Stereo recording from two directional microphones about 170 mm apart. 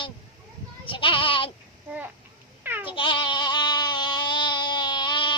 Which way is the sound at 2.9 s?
30° left (ahead or behind).